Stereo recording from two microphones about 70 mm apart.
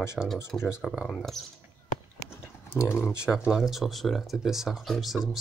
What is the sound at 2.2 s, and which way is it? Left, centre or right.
Typing, left.